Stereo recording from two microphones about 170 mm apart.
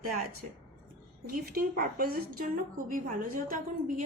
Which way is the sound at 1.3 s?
55° right (ahead or behind).